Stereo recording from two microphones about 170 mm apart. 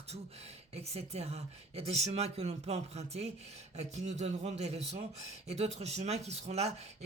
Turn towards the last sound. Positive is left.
turn(degrees=-40)  # may be behind; listen again after turning